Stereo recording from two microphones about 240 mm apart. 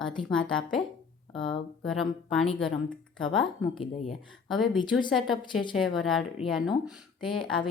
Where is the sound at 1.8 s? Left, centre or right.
Centre.